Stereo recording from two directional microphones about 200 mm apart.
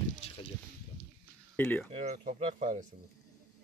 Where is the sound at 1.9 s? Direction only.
35° right (ahead or behind).